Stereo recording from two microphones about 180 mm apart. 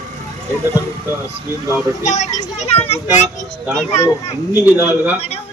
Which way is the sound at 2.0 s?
40° left (ahead or behind).